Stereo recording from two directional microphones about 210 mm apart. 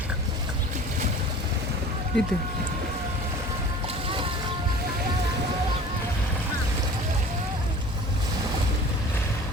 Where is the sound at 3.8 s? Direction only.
25° right (ahead or behind).